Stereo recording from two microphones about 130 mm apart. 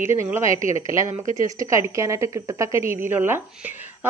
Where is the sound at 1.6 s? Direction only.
25° right (ahead or behind).